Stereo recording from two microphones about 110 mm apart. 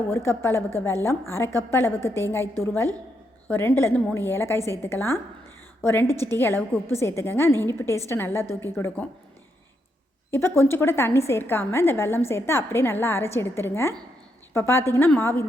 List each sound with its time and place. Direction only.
0.1 s a woman's voice: 20° left (ahead or behind)
10.6 s a woman's voice: 20° left (ahead or behind)